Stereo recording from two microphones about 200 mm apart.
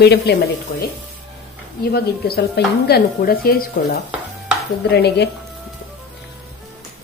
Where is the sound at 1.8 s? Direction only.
50° left (ahead or behind).